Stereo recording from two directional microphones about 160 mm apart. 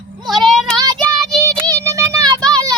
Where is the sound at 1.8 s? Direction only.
20° right (ahead or behind).